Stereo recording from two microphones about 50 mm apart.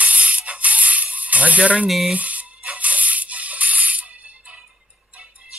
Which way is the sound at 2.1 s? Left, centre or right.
Right.